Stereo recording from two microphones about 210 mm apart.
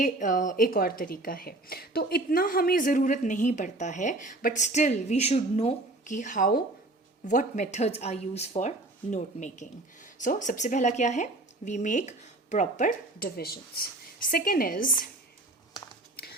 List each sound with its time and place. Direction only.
0.0 s a woman's voice: 40° left (ahead or behind)